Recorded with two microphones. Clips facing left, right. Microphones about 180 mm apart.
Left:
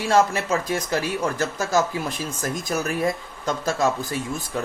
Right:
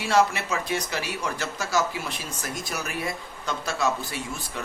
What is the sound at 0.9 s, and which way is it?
Speech, 50° left (ahead or behind).